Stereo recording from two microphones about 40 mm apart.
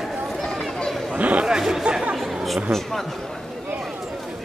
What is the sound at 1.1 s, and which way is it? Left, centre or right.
Speech, right.